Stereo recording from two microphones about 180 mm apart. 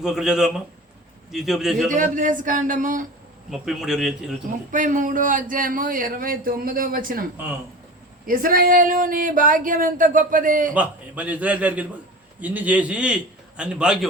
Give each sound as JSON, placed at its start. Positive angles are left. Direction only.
{"t": 0.0, "sound": "a man's voice", "side_deg": -5}
{"t": 1.9, "sound": "a man's voice", "side_deg": -45}
{"t": 3.5, "sound": "a man's voice", "side_deg": 0}
{"t": 4.7, "sound": "a man's voice", "side_deg": -45}
{"t": 8.3, "sound": "a man's voice", "side_deg": -50}
{"t": 10.8, "sound": "a man's voice", "side_deg": -10}